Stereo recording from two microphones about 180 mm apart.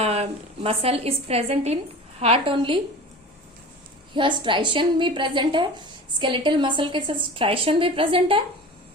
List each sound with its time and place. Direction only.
0.0 s a woman's voice: 35° right (ahead or behind)
4.1 s a woman's voice: 25° right (ahead or behind)